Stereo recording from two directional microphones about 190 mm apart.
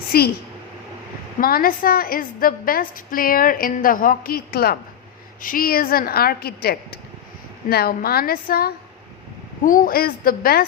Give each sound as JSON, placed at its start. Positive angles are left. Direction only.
{"t": 0.1, "sound": "a woman's voice", "side_deg": 55}
{"t": 1.4, "sound": "a woman's voice", "side_deg": 50}